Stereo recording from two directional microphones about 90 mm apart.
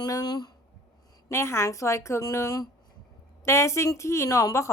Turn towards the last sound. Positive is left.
turn(degrees=35)  # may be behind; listen again after turning